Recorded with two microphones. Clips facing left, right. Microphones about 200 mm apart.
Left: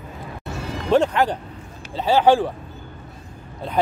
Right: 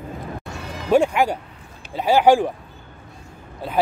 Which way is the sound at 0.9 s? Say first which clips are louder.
Right 1 dB; 10° right (ahead or behind).